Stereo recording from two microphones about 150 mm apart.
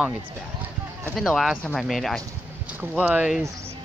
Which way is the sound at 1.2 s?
Centre (ahead or behind).